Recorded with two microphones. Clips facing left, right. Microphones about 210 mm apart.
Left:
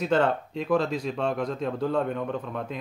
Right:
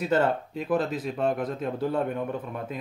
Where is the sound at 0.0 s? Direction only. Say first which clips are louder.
Left 1 dB; 5° right (ahead or behind).